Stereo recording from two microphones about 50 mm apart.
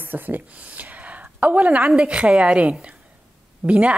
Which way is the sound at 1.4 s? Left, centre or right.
Right.